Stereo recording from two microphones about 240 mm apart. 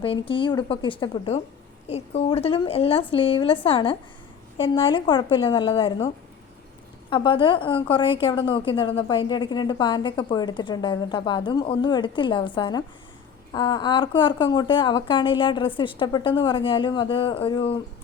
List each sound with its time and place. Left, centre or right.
0.0 s a woman's voice: left
7.1 s a woman's voice: left